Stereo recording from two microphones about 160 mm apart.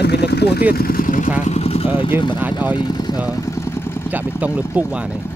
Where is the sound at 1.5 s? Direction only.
40° left (ahead or behind).